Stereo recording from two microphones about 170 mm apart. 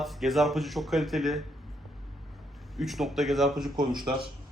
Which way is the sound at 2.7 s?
Centre (ahead or behind).